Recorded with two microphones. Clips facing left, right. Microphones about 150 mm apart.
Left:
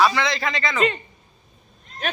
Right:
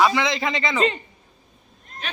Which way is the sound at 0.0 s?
20° right (ahead or behind).